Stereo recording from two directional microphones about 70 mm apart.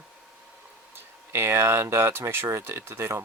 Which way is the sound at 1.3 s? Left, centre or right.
Right.